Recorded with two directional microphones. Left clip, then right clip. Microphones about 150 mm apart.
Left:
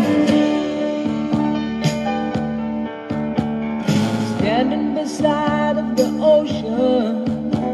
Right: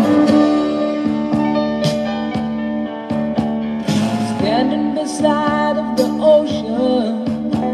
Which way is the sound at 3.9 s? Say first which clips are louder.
Right 3 dB; centre (ahead or behind).